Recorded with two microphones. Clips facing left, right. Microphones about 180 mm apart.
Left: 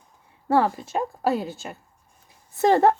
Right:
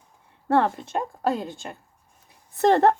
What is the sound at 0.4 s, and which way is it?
A woman's voice, 5° left (ahead or behind).